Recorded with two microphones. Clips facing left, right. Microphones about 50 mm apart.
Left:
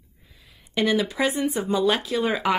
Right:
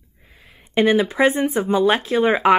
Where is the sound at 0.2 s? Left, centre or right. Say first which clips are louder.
Right 6 dB; right.